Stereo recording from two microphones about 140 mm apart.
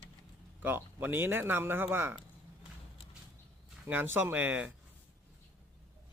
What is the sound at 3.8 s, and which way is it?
Speech, 15° right (ahead or behind).